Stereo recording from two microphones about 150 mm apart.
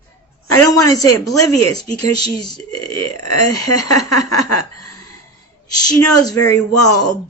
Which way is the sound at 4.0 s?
25° left (ahead or behind).